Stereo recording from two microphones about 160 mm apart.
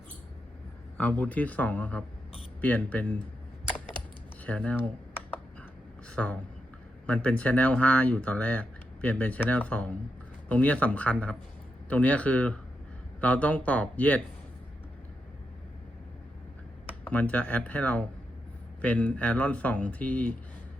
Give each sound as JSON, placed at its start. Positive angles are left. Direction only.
{"t": 0.9, "sound": "speech", "side_deg": 10}
{"t": 4.4, "sound": "computer keyboard", "side_deg": 10}
{"t": 6.1, "sound": "speech", "side_deg": 10}
{"t": 17.0, "sound": "speech", "side_deg": 10}